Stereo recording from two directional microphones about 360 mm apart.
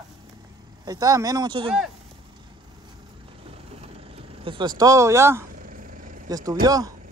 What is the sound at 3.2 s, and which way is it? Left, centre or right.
Vehicle, centre.